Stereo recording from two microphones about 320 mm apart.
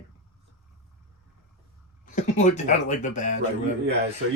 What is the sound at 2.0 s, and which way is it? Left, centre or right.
Speech, left.